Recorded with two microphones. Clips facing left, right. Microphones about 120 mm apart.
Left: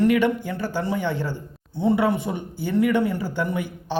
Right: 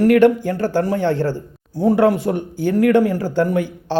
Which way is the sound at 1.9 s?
90° right.